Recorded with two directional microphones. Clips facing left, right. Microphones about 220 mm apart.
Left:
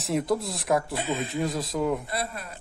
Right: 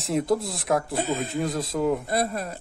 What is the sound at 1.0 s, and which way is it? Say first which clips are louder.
Speech: right 3 dB; 40° right (ahead or behind).